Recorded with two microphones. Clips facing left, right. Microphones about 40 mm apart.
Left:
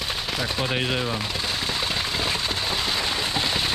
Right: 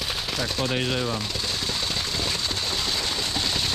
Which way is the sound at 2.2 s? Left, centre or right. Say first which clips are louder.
Left 2 dB; centre.